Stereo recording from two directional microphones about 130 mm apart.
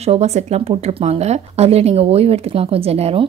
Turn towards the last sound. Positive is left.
turn(degrees=-50)  # may be behind; listen again after turning